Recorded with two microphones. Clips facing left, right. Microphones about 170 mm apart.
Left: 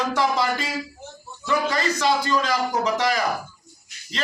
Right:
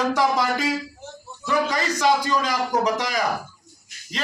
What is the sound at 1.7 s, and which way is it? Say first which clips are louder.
A man's voice: right 1 dB; 15° right (ahead or behind).